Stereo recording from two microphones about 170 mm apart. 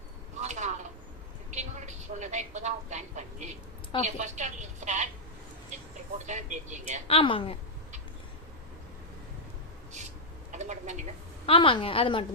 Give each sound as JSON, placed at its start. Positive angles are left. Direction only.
{"t": 0.3, "sound": "a sound", "side_deg": -45}
{"t": 1.5, "sound": "vehicle", "side_deg": -45}
{"t": 4.0, "sound": "a woman's voice", "side_deg": -45}
{"t": 6.2, "sound": "a woman's voice", "side_deg": -45}
{"t": 7.1, "sound": "a woman's voice", "side_deg": 30}
{"t": 10.5, "sound": "a sound", "side_deg": -45}
{"t": 11.4, "sound": "a woman's voice", "side_deg": 30}